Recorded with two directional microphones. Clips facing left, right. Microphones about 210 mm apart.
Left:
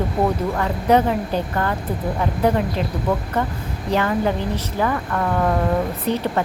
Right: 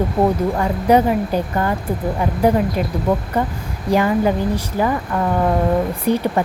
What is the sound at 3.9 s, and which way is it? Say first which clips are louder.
A woman's voice: right 4 dB; 10° right (ahead or behind).